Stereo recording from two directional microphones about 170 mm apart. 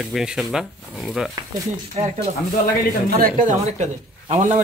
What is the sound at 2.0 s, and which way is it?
Speech, 45° right (ahead or behind).